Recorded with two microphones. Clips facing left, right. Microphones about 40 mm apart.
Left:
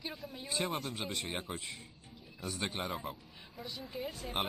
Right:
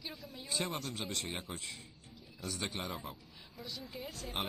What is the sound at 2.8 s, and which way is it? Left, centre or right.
Speech, centre.